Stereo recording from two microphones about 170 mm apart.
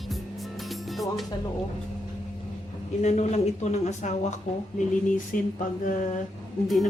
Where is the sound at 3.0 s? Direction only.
40° left (ahead or behind).